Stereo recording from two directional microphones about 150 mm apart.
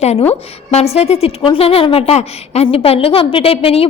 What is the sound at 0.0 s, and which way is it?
A woman's voice, 45° left (ahead or behind).